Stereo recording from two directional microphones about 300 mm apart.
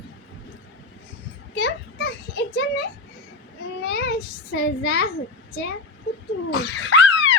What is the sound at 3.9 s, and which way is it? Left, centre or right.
A child's voice, left.